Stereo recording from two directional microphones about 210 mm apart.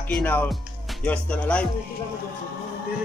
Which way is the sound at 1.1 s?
5° left (ahead or behind).